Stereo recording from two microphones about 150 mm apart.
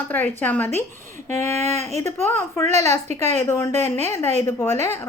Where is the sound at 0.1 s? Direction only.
10° left (ahead or behind).